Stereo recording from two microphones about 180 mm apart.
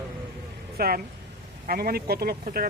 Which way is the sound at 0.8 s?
55° right (ahead or behind).